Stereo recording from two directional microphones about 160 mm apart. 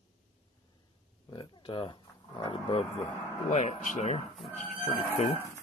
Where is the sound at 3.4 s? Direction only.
50° left (ahead or behind).